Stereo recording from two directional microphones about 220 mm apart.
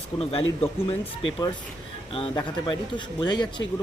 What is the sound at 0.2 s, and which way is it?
Speech, 25° left (ahead or behind).